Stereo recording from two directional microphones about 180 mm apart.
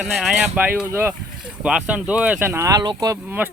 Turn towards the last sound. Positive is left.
turn(degrees=-10)  # may be behind; listen again after turning